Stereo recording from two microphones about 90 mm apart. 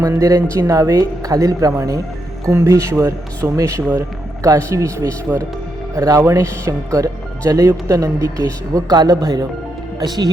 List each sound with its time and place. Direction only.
0.1 s speech: 40° right (ahead or behind)